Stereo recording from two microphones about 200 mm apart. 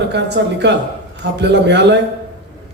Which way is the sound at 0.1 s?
60° right (ahead or behind).